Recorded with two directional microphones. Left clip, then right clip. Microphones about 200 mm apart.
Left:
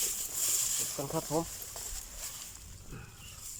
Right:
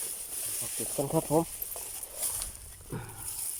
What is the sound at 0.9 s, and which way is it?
Speech, 15° right (ahead or behind).